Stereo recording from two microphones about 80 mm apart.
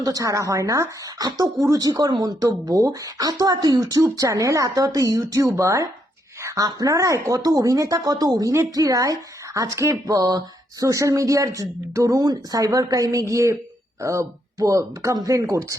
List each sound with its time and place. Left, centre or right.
0.0 s speech: right